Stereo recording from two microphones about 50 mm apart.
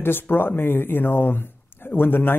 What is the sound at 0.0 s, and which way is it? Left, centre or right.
Speech, left.